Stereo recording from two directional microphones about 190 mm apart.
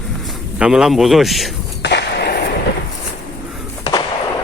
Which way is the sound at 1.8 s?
65° left (ahead or behind).